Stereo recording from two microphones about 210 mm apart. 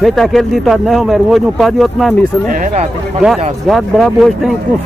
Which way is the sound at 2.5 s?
40° right (ahead or behind).